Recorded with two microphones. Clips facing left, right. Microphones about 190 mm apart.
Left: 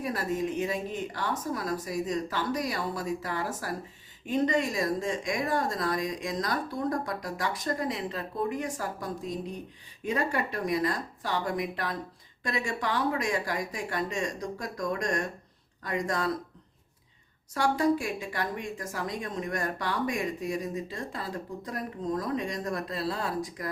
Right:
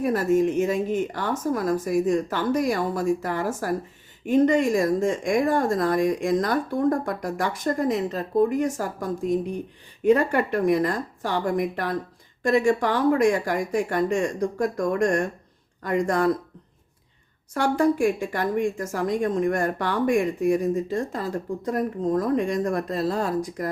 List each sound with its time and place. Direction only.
0.0 s a woman's voice: 45° right (ahead or behind)
10.0 s a woman's voice: 55° right (ahead or behind)
17.5 s a woman's voice: 50° right (ahead or behind)